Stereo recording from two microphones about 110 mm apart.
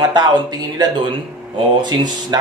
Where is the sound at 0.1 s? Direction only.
40° right (ahead or behind).